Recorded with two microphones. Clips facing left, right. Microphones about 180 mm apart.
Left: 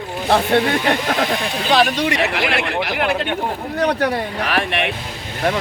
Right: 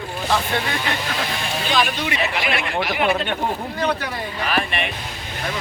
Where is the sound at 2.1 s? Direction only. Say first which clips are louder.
Left 4 dB; 70° left (ahead or behind).